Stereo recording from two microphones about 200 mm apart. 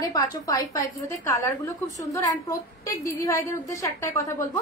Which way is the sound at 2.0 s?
15° left (ahead or behind).